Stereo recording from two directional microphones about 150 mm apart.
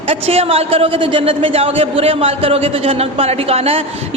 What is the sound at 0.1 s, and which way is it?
A man's voice, 40° right (ahead or behind).